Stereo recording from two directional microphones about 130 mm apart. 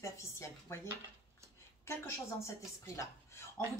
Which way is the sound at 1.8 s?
20° left (ahead or behind).